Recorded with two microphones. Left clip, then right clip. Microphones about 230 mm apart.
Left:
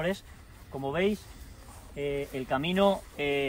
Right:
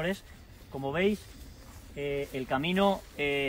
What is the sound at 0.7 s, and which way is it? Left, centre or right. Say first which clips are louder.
Speech: even; centre.